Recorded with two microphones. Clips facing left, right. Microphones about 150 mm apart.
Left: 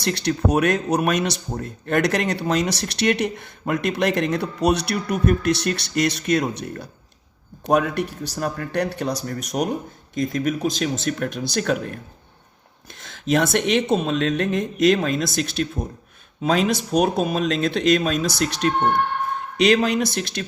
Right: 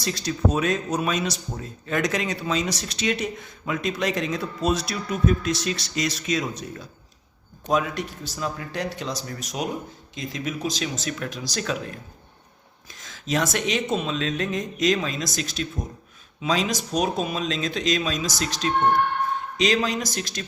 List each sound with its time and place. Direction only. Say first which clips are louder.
0.0 s speech: left 3 dB; 65° left (ahead or behind)
12.9 s a sound: left 3 dB; 55° left (ahead or behind)
13.2 s speech: left 5 dB; 55° left (ahead or behind)